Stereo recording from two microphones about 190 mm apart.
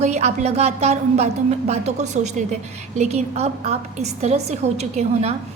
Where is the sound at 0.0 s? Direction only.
35° right (ahead or behind).